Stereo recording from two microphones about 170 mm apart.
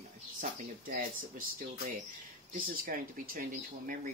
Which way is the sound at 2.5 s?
55° right (ahead or behind).